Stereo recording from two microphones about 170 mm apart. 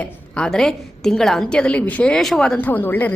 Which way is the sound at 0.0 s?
5° left (ahead or behind).